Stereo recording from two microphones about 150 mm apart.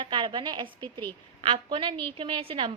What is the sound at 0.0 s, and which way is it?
A woman's voice, 35° right (ahead or behind).